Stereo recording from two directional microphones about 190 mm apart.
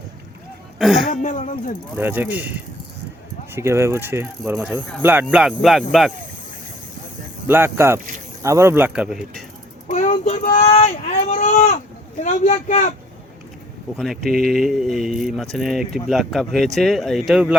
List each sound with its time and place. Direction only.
0.8 s speech: centre (ahead or behind)
1.1 s speech: 40° left (ahead or behind)
2.0 s speech: 10° right (ahead or behind)
3.5 s speech: 15° right (ahead or behind)
7.4 s speech: 10° right (ahead or behind)
9.9 s a sound: 40° left (ahead or behind)
12.2 s speech: 40° left (ahead or behind)
13.9 s speech: centre (ahead or behind)